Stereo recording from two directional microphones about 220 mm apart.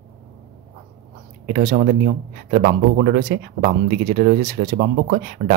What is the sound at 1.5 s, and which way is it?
Speech, 40° right (ahead or behind).